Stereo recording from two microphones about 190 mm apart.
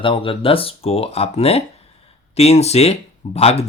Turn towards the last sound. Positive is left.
turn(degrees=30)  # may be behind; listen again after turning